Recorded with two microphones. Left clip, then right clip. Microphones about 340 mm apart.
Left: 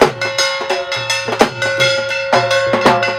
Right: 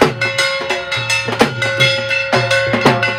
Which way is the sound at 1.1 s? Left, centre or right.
Left.